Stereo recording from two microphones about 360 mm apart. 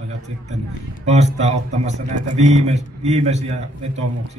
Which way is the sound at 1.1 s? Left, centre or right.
Centre.